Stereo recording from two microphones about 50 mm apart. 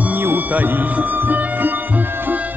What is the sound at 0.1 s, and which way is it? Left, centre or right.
Music, right.